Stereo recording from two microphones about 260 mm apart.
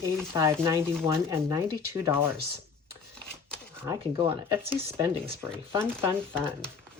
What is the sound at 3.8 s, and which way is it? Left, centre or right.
Speech, centre.